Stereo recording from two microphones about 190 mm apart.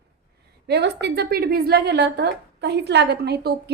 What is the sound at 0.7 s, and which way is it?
A woman's voice, 60° right (ahead or behind).